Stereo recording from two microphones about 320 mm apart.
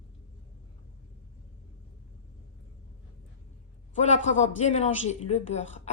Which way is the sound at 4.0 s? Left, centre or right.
Left.